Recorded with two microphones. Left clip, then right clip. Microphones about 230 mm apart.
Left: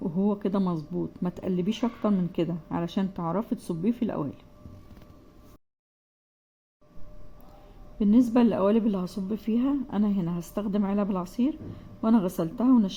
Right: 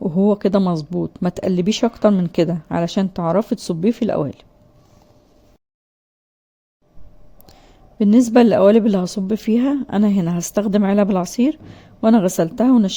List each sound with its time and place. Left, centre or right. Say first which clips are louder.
0.0 s speech: right 11 dB; right
7.9 s speech: right 10 dB; right